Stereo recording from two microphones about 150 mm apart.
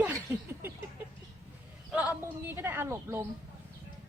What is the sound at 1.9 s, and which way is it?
Speech, 10° right (ahead or behind).